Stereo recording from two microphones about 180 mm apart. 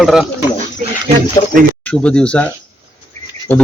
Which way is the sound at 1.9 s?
5° left (ahead or behind).